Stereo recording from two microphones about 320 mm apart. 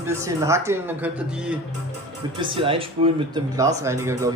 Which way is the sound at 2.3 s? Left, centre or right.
Centre.